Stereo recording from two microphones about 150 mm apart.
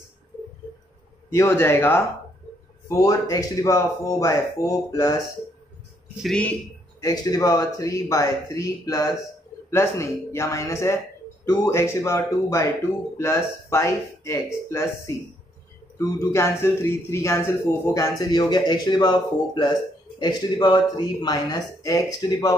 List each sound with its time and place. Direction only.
1.3 s a man's voice: 20° left (ahead or behind)
6.2 s speech: 5° left (ahead or behind)
7.0 s a man's voice: 25° left (ahead or behind)
16.2 s a man's voice: 20° left (ahead or behind)